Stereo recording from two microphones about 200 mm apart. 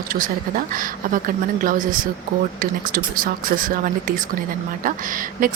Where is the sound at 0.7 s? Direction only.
45° right (ahead or behind).